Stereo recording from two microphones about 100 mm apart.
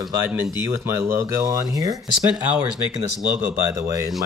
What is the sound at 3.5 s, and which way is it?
Speech, 35° right (ahead or behind).